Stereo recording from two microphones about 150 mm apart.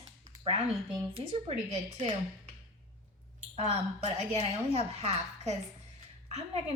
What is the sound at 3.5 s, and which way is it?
A woman's voice, 45° right (ahead or behind).